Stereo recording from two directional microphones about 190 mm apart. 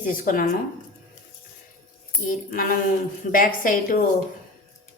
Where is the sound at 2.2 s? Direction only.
45° left (ahead or behind).